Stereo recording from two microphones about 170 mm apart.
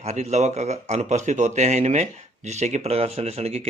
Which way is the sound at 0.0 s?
40° right (ahead or behind).